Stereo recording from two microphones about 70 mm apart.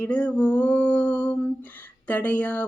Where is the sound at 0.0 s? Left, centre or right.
Centre.